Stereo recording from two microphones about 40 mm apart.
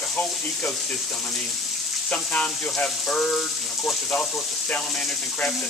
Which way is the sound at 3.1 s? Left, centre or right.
Left.